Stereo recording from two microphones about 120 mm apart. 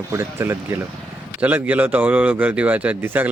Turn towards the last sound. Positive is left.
turn(degrees=-15)  # may be behind; listen again after turning